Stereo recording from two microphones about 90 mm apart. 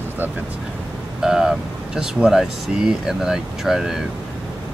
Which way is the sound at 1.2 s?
5° right (ahead or behind).